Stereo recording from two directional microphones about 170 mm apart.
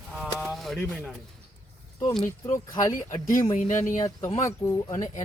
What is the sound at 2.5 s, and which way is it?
Speech, 25° left (ahead or behind).